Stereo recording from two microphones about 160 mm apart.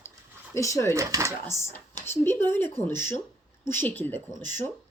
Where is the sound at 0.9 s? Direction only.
20° right (ahead or behind).